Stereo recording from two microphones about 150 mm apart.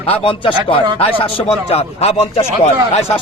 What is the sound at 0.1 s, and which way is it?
A man's voice, 35° left (ahead or behind).